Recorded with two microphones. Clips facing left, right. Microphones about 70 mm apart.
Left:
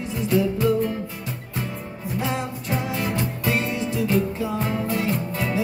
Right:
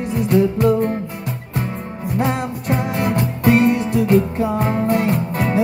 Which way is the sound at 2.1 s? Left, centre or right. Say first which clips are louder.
Right 6 dB; right.